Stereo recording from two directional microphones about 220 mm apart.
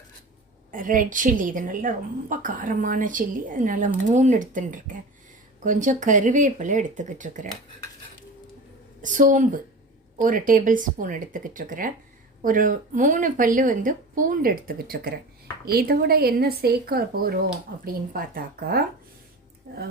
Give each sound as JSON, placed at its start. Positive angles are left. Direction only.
{"t": 0.7, "sound": "speech", "side_deg": -35}
{"t": 9.0, "sound": "a woman's voice", "side_deg": -35}